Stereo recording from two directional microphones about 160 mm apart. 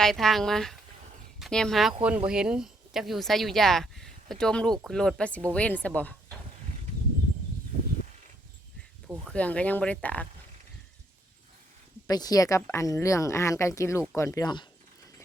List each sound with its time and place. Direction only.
0.0 s speech: centre (ahead or behind)
2.0 s speech: 5° right (ahead or behind); by 6.3 s 10° left (ahead or behind)
9.2 s speech: 5° left (ahead or behind)
12.0 s speech: 25° left (ahead or behind)